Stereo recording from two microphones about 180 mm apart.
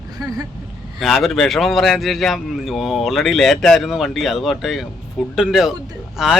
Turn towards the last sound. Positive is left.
turn(degrees=0)  # may be behind; listen again after turning